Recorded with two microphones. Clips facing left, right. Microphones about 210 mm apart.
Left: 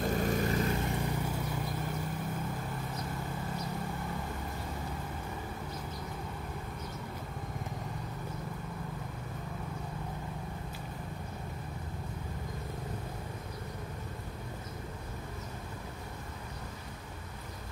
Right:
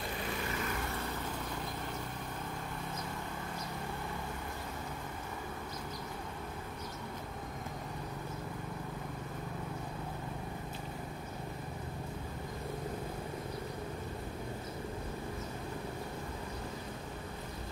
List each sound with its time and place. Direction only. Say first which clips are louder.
0.0 s vehicle: left 8 dB; 45° left (ahead or behind)
0.7 s vehicle: left 5 dB; 15° left (ahead or behind)